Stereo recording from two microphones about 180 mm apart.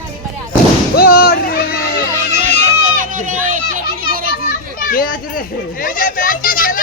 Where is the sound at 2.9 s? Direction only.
45° right (ahead or behind).